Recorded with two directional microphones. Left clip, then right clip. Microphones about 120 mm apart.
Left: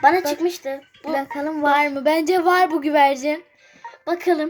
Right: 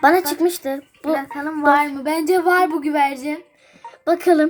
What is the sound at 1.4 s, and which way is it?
Speech, 40° left (ahead or behind).